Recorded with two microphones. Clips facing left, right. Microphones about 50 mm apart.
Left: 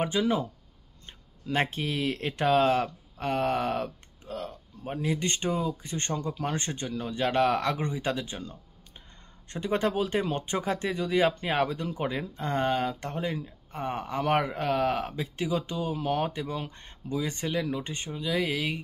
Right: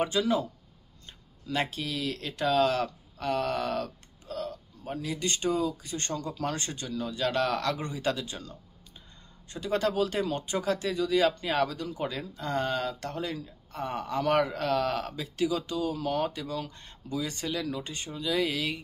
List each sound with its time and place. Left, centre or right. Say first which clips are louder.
0.0 s speech: even; left
18.2 s speech: even; centre